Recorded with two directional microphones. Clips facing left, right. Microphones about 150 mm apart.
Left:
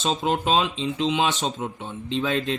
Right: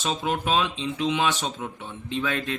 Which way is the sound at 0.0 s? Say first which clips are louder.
Left 3 dB; 25° left (ahead or behind).